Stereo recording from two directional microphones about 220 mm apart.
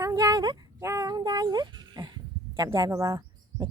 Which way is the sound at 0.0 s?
15° right (ahead or behind).